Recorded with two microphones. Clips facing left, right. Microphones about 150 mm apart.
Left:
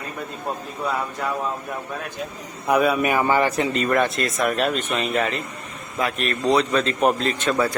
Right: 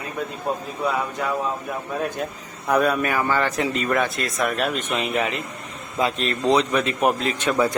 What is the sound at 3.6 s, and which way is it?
Speech, centre (ahead or behind).